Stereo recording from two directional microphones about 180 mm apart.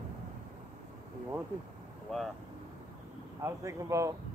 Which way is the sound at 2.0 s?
Centre (ahead or behind).